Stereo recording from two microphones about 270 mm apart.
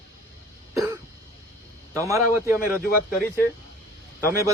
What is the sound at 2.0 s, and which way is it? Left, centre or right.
Speech, centre.